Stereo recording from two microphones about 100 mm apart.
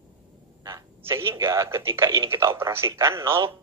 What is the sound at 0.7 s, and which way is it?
A man's voice, 30° right (ahead or behind).